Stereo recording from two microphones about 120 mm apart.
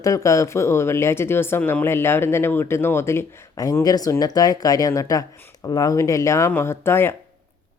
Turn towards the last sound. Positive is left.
turn(degrees=20)  # may be behind; listen again after turning